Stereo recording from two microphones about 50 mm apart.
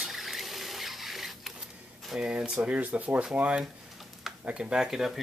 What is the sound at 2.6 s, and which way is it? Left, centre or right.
Speech, right.